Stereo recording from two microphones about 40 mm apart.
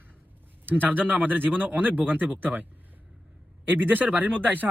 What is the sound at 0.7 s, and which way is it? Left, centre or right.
Speech, right.